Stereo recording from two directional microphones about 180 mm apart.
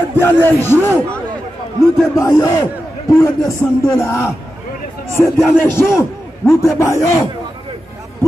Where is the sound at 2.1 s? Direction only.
20° left (ahead or behind).